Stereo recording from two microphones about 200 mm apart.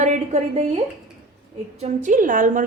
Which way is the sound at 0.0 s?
35° right (ahead or behind).